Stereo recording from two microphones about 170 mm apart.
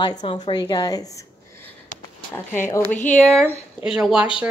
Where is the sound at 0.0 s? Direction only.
25° left (ahead or behind).